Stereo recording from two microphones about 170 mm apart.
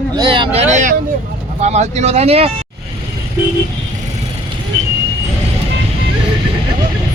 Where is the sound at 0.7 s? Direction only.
45° right (ahead or behind).